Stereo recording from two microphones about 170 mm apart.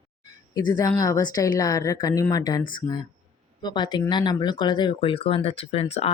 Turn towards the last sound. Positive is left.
turn(degrees=35)  # may be behind; listen again after turning